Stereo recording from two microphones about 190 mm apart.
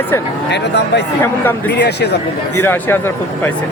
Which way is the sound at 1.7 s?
60° left (ahead or behind).